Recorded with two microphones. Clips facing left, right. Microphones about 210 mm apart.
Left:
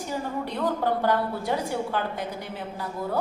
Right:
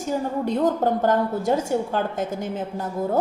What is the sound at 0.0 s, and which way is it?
A woman's voice, 45° right (ahead or behind).